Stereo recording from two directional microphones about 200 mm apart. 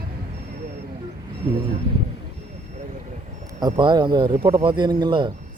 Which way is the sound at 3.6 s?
20° right (ahead or behind).